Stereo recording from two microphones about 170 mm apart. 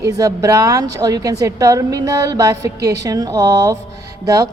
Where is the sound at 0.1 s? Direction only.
20° right (ahead or behind).